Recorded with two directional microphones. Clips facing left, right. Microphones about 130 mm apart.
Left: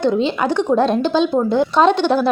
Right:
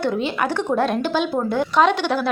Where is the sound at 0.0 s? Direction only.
20° left (ahead or behind).